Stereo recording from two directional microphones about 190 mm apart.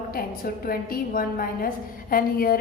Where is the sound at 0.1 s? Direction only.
50° left (ahead or behind).